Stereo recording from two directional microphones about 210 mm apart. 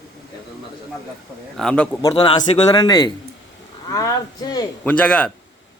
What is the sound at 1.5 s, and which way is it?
Speech, 5° left (ahead or behind).